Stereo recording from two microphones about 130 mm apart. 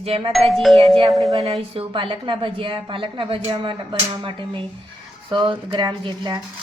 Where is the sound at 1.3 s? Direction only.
50° right (ahead or behind).